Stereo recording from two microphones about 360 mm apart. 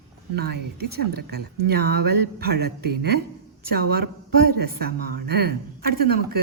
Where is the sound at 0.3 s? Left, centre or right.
Right.